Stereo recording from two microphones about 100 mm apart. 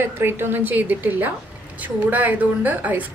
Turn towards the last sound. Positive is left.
turn(degrees=-15)  # may be behind; listen again after turning